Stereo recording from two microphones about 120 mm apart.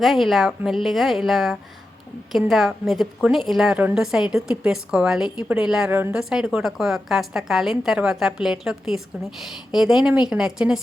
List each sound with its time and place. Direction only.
0.0 s a woman's voice: centre (ahead or behind)
5.9 s speech: 15° right (ahead or behind)
6.1 s a woman's voice: 5° right (ahead or behind)